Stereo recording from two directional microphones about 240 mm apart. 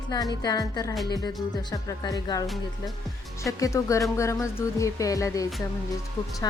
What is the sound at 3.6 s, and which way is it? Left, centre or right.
A woman's voice, centre.